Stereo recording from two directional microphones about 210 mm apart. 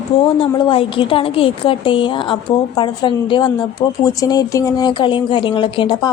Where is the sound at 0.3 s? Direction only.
25° left (ahead or behind).